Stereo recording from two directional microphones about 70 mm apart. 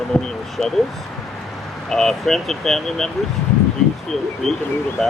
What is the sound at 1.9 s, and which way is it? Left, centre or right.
Speech, centre.